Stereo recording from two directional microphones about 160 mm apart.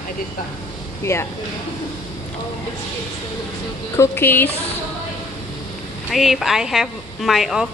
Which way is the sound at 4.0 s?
15° left (ahead or behind).